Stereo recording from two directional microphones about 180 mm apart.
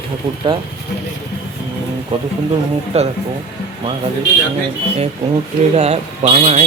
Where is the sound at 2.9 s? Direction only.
35° right (ahead or behind).